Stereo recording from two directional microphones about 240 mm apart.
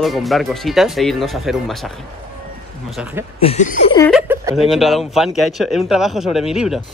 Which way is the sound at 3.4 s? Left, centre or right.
Left.